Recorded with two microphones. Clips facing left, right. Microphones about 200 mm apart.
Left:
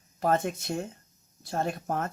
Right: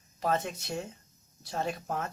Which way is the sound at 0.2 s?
50° left (ahead or behind).